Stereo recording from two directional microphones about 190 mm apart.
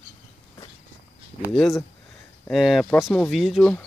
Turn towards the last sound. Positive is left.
turn(degrees=0)  # may be behind; listen again after turning